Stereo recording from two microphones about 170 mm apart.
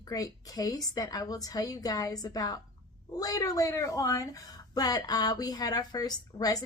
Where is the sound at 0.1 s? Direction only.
20° left (ahead or behind).